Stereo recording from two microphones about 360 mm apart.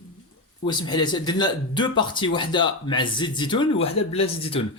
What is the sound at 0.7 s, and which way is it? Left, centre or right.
Speech, centre.